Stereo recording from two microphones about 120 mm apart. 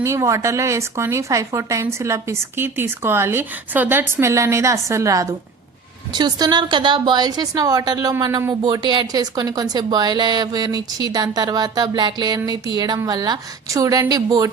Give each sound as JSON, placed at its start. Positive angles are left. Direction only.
{"t": 0.0, "sound": "speech", "side_deg": -25}